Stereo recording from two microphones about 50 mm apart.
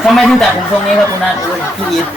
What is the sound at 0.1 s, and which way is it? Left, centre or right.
Speech, centre.